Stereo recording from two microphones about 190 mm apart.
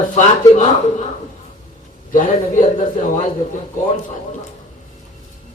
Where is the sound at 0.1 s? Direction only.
40° left (ahead or behind).